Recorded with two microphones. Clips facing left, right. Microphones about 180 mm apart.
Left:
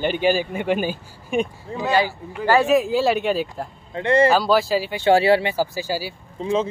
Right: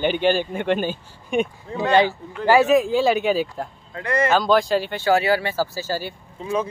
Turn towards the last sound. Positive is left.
turn(degrees=35)  # may be behind; listen again after turning